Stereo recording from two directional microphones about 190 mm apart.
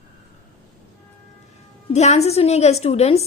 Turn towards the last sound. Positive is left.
turn(degrees=35)  # may be behind; listen again after turning